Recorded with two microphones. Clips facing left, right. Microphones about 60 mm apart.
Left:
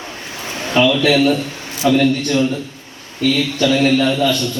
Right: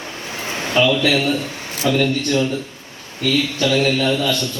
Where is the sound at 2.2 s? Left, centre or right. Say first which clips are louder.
Left 2 dB; left.